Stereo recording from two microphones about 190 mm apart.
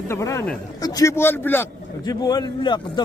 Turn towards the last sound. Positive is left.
turn(degrees=25)  # may be behind; listen again after turning